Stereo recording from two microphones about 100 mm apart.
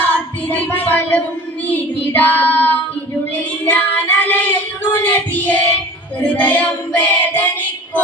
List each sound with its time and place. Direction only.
0.0 s music: 15° left (ahead or behind)
1.6 s child singing: 15° left (ahead or behind)